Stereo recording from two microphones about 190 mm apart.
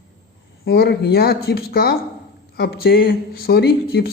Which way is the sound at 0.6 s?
55° left (ahead or behind).